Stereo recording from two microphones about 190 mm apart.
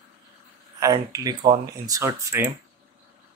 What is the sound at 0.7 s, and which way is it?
Speech, 20° right (ahead or behind).